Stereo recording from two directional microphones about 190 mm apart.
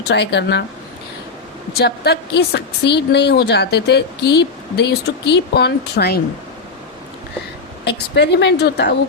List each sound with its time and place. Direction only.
0.0 s a woman's voice: 65° left (ahead or behind)
1.7 s a woman's voice: 60° left (ahead or behind)
7.9 s a woman's voice: 65° left (ahead or behind)